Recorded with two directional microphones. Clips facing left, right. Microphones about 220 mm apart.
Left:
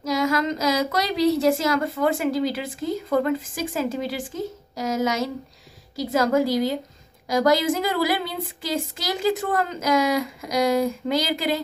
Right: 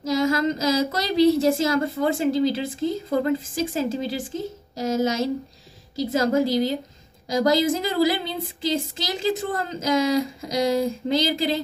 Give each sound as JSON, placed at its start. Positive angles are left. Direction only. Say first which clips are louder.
{"t": 0.0, "sound": "speech", "louder": "right 2 dB", "side_deg": -25}